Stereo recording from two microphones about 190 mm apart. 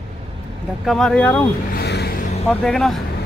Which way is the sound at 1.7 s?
60° left (ahead or behind).